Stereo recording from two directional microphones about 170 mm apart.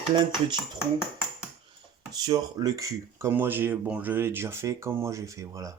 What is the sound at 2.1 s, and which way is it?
Speech, 20° right (ahead or behind).